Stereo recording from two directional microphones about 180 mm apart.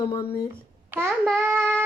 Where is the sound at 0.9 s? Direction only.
10° right (ahead or behind).